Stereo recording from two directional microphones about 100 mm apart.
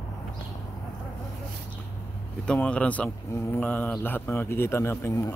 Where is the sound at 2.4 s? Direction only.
10° left (ahead or behind).